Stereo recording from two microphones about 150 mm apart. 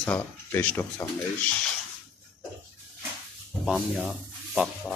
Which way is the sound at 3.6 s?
Centre (ahead or behind).